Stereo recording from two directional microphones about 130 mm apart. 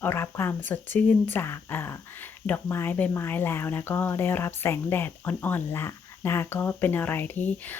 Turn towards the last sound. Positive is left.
turn(degrees=15)  # may be behind; listen again after turning